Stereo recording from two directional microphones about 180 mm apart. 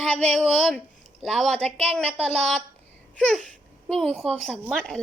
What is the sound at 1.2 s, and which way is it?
A woman's voice, 5° left (ahead or behind).